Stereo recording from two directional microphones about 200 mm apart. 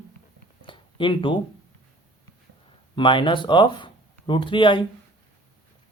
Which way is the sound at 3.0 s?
25° left (ahead or behind).